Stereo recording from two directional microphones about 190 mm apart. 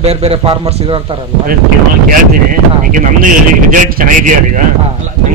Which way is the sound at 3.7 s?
45° right (ahead or behind).